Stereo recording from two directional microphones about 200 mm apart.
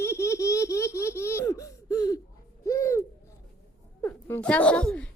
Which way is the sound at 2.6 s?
15° left (ahead or behind).